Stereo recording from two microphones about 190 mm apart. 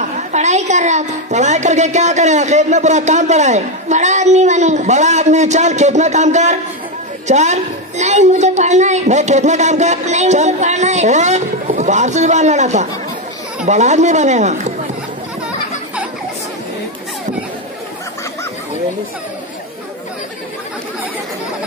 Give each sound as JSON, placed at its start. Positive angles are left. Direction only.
{"t": 0.3, "sound": "a woman's voice", "side_deg": -35}